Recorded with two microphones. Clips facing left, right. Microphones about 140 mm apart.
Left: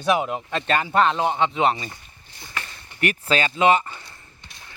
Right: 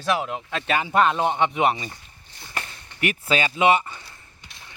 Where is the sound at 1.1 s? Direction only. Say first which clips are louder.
Even; 15° left (ahead or behind).